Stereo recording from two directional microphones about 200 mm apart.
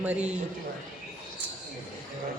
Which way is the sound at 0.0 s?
5° right (ahead or behind).